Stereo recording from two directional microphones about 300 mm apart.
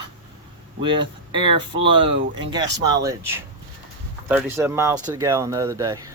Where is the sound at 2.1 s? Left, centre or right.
Right.